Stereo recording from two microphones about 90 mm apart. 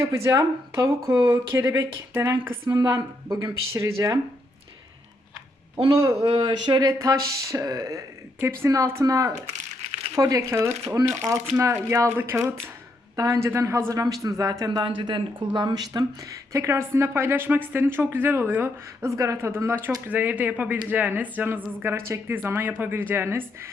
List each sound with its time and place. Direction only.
0.0 s speech: 35° right (ahead or behind)
5.9 s speech: 30° right (ahead or behind)
6.4 s a sound: 50° right (ahead or behind)
7.1 s speech: 35° right (ahead or behind)
14.0 s speech: 40° right (ahead or behind)
14.8 s speech: 65° right (ahead or behind)
16.5 s speech: 35° right (ahead or behind)